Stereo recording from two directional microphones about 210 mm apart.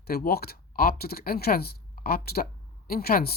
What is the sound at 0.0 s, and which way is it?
A woman's voice, 45° left (ahead or behind).